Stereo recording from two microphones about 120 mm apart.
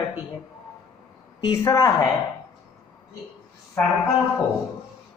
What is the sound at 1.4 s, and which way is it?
Speech, 30° left (ahead or behind).